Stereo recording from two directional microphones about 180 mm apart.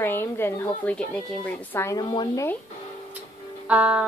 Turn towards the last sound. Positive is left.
turn(degrees=-5)  # may be behind; listen again after turning